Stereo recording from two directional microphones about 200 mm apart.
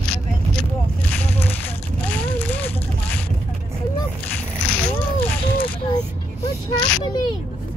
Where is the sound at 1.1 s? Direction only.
10° left (ahead or behind).